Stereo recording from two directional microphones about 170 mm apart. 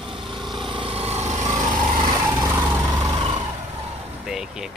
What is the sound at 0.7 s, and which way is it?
Vehicle, 35° right (ahead or behind).